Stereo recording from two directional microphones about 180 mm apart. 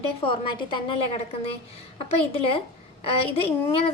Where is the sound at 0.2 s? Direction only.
25° left (ahead or behind).